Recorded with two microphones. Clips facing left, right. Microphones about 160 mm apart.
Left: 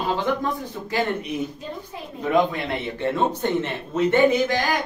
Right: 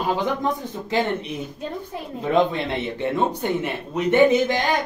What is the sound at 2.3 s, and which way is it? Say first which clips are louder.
Speech: right 1 dB; 25° right (ahead or behind).